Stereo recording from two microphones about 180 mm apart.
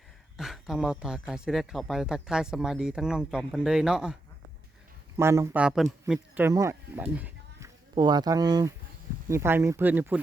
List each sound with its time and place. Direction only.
0.3 s speech: centre (ahead or behind)
5.1 s speech: 15° right (ahead or behind)
7.9 s speech: 20° right (ahead or behind)